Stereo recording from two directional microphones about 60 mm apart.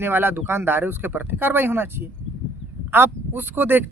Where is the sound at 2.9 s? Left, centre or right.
Right.